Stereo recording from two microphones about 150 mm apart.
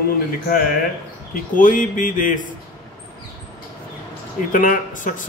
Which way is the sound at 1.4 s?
60° left (ahead or behind).